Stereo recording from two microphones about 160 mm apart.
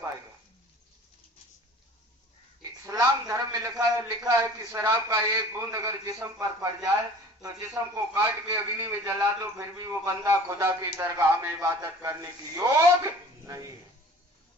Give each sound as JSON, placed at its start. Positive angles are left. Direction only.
{"t": 2.8, "sound": "a man's voice", "side_deg": -20}